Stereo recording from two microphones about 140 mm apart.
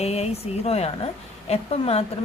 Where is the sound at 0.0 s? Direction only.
50° left (ahead or behind).